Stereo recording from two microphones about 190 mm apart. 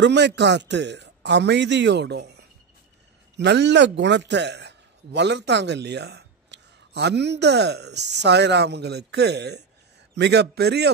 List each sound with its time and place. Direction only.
0.0 s a man's voice: 65° right (ahead or behind)